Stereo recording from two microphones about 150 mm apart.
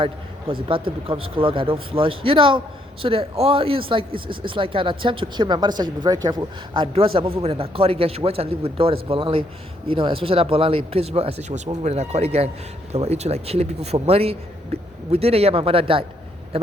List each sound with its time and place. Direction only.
0.7 s a man's voice: 35° right (ahead or behind)